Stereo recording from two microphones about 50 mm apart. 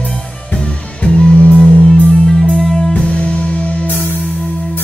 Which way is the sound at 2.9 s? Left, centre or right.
Left.